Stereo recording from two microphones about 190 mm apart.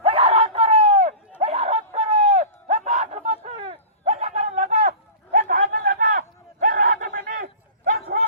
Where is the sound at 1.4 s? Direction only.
35° right (ahead or behind).